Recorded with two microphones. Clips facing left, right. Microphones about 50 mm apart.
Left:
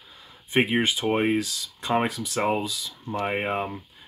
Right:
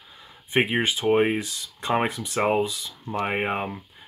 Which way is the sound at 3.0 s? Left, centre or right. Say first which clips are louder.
Right 1 dB; centre.